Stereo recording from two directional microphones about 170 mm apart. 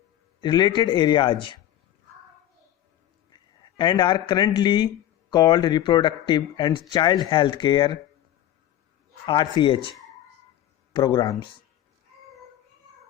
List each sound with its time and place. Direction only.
0.4 s speech: 25° left (ahead or behind)
3.6 s speech: 25° left (ahead or behind)
9.2 s speech: 25° left (ahead or behind)
10.9 s speech: 25° left (ahead or behind)